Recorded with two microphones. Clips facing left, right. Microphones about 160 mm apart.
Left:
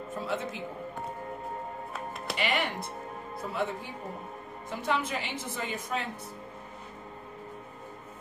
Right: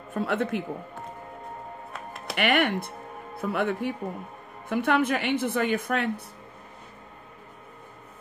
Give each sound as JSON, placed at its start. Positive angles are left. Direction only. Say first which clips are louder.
{"t": 0.1, "sound": "a woman's voice", "louder": "right 8 dB", "side_deg": -60}
{"t": 2.3, "sound": "a woman's voice", "louder": "right 7 dB", "side_deg": -60}